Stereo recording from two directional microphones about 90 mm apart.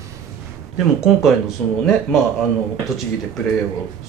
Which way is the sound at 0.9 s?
Centre (ahead or behind).